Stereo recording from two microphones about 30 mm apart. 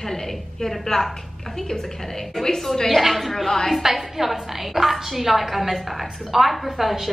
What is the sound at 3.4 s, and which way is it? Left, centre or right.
Speech, centre.